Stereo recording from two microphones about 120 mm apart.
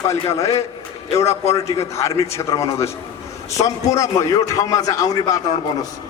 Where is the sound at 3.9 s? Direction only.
30° left (ahead or behind).